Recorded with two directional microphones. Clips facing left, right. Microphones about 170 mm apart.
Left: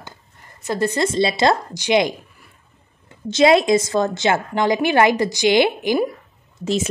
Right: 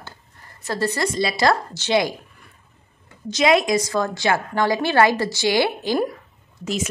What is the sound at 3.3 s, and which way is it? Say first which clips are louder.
A woman's voice: left 4 dB; 30° left (ahead or behind).